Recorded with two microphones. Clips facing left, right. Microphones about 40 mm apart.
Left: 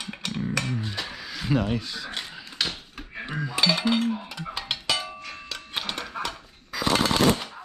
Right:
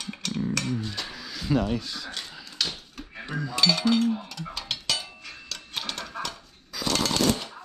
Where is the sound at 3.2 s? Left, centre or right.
Centre.